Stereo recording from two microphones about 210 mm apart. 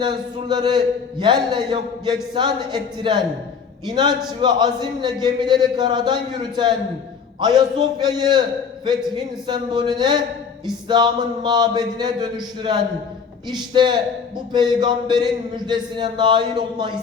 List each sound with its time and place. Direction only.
0.0 s a man's voice: 20° right (ahead or behind)